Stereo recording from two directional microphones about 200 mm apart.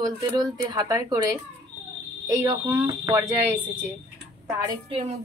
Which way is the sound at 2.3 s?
15° right (ahead or behind).